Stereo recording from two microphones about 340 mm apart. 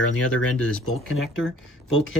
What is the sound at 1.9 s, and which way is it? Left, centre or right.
Speech, left.